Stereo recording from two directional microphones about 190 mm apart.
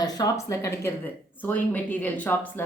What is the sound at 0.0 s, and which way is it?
A woman's voice, 20° left (ahead or behind).